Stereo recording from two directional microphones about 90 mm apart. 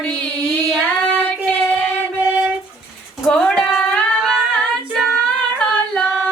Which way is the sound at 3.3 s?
5° left (ahead or behind).